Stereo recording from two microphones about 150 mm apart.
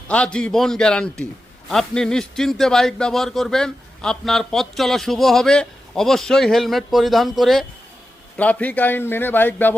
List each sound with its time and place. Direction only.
0.1 s a man's voice: 5° left (ahead or behind)